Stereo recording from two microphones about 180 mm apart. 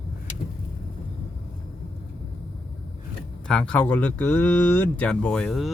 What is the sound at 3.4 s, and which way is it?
Speech, 5° left (ahead or behind).